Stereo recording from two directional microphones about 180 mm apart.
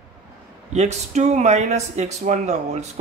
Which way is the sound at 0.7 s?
40° right (ahead or behind).